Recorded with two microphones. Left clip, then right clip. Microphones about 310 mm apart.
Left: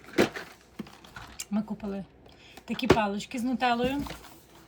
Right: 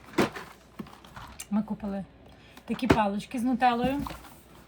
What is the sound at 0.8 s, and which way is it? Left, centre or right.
Mechanisms, centre.